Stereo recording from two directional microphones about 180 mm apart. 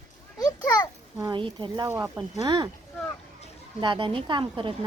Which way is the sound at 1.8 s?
15° right (ahead or behind).